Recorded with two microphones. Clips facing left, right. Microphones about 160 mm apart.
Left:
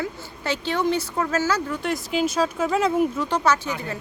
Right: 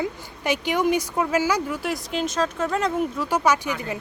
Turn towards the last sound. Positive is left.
turn(degrees=-15)  # may be behind; listen again after turning